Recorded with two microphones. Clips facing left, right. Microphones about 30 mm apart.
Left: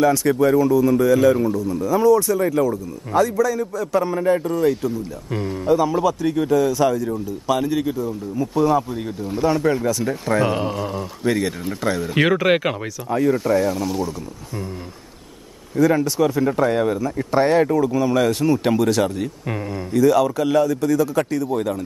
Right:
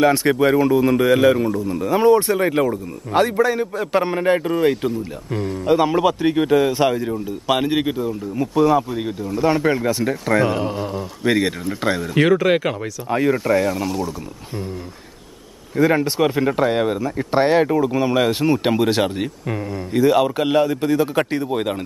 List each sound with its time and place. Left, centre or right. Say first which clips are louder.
0.0 s a man's voice: right 1 dB; right
5.3 s speech: right 1 dB; centre
5.7 s speech: right 1 dB; right
8.1 s speech: right 1 dB; right
10.4 s speech: right 1 dB; centre
11.2 s speech: right 2 dB; right
12.1 s speech: right 1 dB; centre
13.3 s speech: even; centre
15.7 s speech: even; right
19.4 s speech: right 1 dB; centre
19.9 s speech: even; right